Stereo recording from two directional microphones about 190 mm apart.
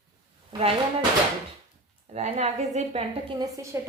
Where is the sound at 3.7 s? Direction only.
15° right (ahead or behind).